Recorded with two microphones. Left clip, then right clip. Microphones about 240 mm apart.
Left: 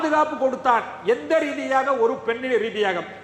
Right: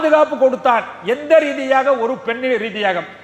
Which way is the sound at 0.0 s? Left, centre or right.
Right.